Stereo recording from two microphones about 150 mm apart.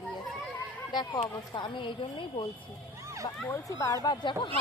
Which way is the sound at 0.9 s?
30° left (ahead or behind).